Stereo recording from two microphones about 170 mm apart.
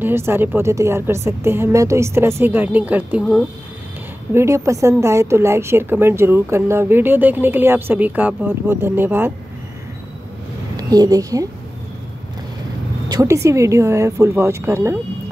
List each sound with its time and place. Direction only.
0.0 s speech: 15° right (ahead or behind)
10.8 s a woman's voice: 20° right (ahead or behind)
13.1 s speech: 20° right (ahead or behind)